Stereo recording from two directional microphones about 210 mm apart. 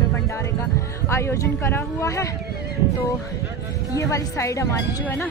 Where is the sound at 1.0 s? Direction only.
15° left (ahead or behind).